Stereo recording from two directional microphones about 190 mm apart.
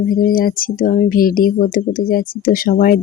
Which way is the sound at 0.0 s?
50° left (ahead or behind).